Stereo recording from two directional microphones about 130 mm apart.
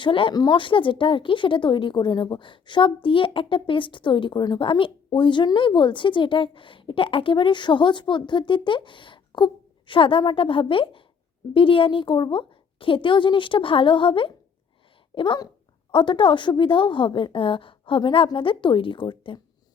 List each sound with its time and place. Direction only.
0.0 s a woman's voice: 40° left (ahead or behind)